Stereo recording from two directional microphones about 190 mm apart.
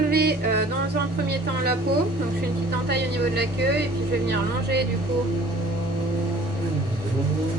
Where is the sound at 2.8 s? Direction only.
60° right (ahead or behind).